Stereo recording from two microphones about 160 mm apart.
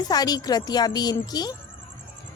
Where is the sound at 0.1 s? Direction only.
25° left (ahead or behind).